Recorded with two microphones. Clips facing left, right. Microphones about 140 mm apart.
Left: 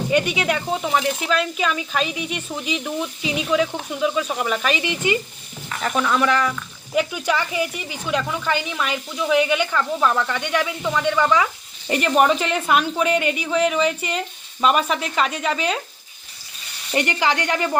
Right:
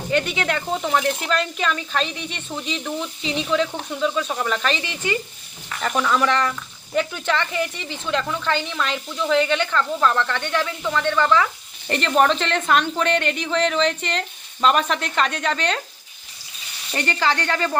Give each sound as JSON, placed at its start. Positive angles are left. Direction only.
{"t": 0.1, "sound": "speech", "side_deg": 15}
{"t": 5.8, "sound": "speech", "side_deg": 0}
{"t": 16.9, "sound": "speech", "side_deg": 15}